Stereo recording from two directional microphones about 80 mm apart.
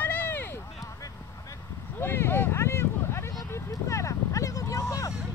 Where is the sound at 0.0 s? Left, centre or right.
Left.